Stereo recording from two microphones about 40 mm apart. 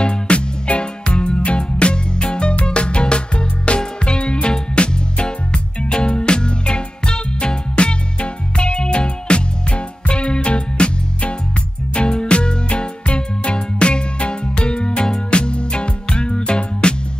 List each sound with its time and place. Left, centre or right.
0.0 s music: left